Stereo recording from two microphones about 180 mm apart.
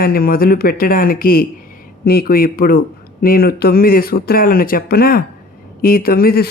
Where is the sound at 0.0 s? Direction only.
55° left (ahead or behind).